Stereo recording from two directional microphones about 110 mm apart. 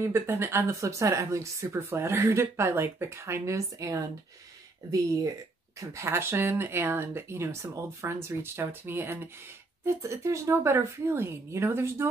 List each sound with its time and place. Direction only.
0.1 s speech: 20° right (ahead or behind)
5.8 s speech: 25° right (ahead or behind)